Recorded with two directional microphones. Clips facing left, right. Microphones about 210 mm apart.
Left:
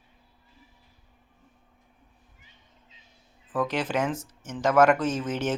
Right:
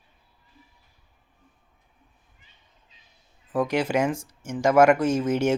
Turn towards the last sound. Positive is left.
turn(degrees=-10)  # may be behind; listen again after turning